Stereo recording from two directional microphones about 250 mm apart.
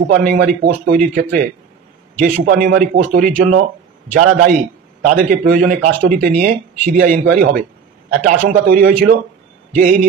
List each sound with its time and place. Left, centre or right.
0.1 s speech: right
4.2 s a man's voice: right
5.0 s speech: right